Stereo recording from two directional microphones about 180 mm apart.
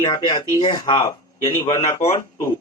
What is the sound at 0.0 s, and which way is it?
A man's voice, 25° left (ahead or behind).